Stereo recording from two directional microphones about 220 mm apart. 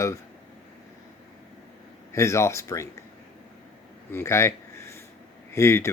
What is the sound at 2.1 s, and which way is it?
Speech, 15° left (ahead or behind).